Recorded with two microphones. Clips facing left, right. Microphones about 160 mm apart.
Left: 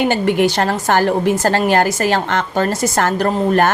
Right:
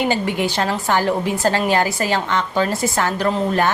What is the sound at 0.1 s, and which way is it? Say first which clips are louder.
Speech: left 5 dB; 60° left (ahead or behind).